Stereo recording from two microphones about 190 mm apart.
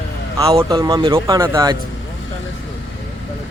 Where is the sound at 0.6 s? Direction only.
20° right (ahead or behind).